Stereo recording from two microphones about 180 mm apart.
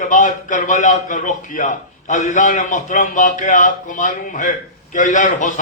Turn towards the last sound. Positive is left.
turn(degrees=45)  # may be behind; listen again after turning